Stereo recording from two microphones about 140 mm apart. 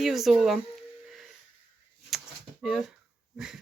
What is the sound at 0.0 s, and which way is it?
Speech, centre (ahead or behind).